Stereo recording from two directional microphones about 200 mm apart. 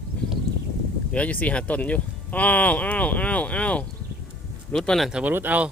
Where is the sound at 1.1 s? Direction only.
5° left (ahead or behind).